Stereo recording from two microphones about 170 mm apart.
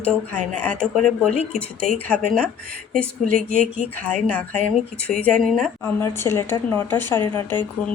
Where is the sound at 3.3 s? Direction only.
40° left (ahead or behind).